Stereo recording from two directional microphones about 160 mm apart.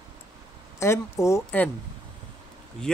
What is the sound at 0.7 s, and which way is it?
Speech, 15° left (ahead or behind).